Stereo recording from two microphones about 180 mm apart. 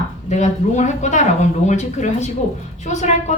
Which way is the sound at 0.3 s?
40° left (ahead or behind).